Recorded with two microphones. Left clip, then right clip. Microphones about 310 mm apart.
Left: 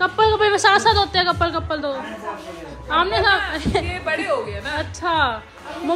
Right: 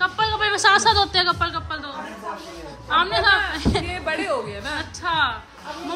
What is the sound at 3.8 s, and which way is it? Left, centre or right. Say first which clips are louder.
Speech: left 2 dB; right.